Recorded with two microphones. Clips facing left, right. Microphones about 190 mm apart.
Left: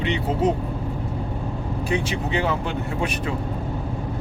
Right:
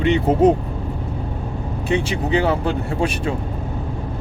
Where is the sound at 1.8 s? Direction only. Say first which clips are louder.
Right 4 dB; 30° right (ahead or behind).